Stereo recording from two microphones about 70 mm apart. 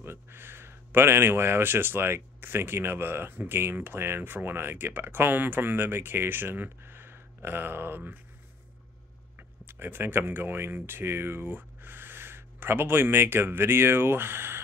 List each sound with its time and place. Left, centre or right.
0.0 s speech: right
9.4 s speech: right